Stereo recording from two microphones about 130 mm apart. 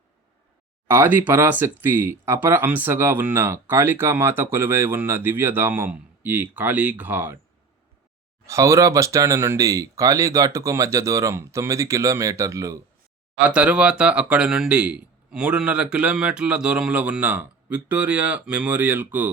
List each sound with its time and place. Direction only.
0.9 s speech: 15° right (ahead or behind)
8.4 s speech: 25° right (ahead or behind)
13.5 s speech: 10° right (ahead or behind)